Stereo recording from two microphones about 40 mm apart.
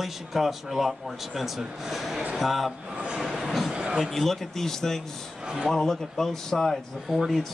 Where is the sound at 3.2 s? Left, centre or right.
Centre.